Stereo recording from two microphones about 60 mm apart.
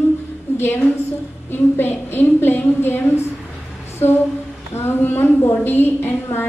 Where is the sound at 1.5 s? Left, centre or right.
Left.